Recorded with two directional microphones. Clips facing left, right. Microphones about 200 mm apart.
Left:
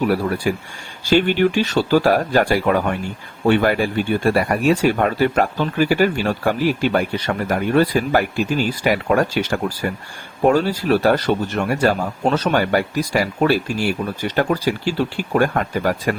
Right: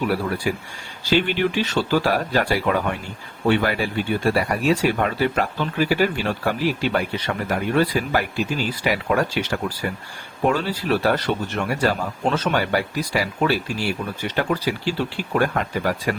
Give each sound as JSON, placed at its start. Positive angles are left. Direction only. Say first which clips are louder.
{"t": 1.1, "sound": "speech", "louder": "left 4 dB", "side_deg": 45}